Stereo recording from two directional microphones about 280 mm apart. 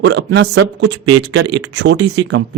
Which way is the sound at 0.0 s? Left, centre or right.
Right.